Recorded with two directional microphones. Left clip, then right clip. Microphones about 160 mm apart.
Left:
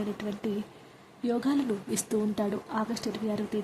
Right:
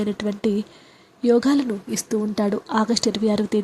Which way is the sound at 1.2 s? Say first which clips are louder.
Right 11 dB; 35° right (ahead or behind).